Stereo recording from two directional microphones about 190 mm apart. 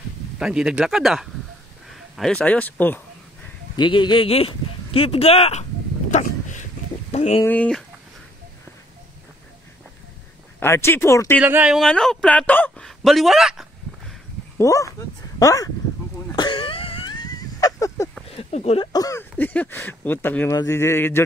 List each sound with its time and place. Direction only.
0.4 s a man's voice: 5° right (ahead or behind)
3.7 s speech: 25° left (ahead or behind)
6.1 s a sound: 40° left (ahead or behind)
7.4 s speech: 5° left (ahead or behind)
10.6 s speech: 15° left (ahead or behind)
11.4 s a man's voice: 5° right (ahead or behind)
14.6 s speech: 15° left (ahead or behind)
16.3 s a sound: 25° left (ahead or behind)
18.3 s speech: 35° left (ahead or behind)
18.9 s speech: 20° left (ahead or behind)